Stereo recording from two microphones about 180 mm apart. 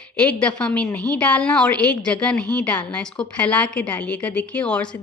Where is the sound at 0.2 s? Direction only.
5° left (ahead or behind).